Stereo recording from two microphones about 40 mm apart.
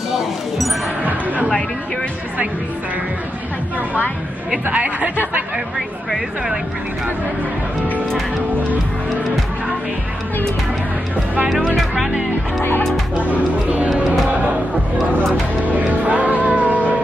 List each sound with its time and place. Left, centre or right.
1.0 s a sound: right
4.6 s speech: right
11.7 s music: centre
13.2 s speech: right
15.6 s music: right